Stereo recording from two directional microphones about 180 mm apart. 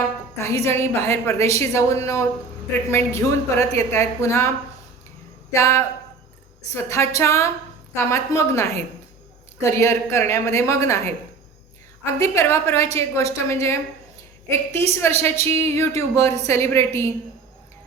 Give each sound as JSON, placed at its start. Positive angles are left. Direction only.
{"t": 0.3, "sound": "a woman's voice", "side_deg": 15}
{"t": 5.5, "sound": "a woman's voice", "side_deg": 15}
{"t": 12.2, "sound": "a woman's voice", "side_deg": 15}